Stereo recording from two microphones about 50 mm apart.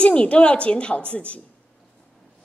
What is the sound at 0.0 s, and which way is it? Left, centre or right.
A woman's voice, left.